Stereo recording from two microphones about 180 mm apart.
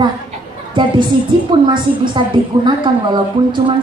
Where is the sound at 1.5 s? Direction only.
25° right (ahead or behind).